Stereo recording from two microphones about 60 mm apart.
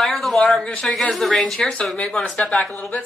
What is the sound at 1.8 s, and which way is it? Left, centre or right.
Speech, centre.